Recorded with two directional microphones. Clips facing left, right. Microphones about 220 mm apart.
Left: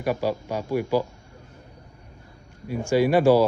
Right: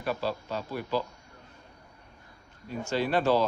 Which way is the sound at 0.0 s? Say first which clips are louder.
Left 6 dB; 15° left (ahead or behind).